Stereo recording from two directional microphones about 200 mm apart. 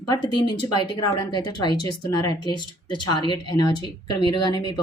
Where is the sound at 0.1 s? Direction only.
20° left (ahead or behind).